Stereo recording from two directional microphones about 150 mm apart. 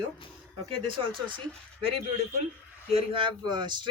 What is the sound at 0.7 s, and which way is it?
Speech, 35° right (ahead or behind).